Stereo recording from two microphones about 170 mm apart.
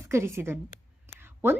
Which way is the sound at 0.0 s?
15° right (ahead or behind).